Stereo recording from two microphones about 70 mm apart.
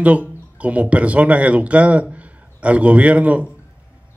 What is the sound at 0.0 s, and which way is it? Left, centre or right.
Speech, centre.